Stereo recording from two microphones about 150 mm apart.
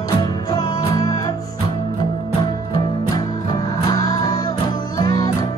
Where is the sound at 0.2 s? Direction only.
25° left (ahead or behind).